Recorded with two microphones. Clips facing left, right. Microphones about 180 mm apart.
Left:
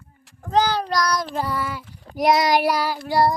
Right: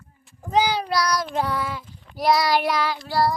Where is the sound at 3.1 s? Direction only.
20° left (ahead or behind).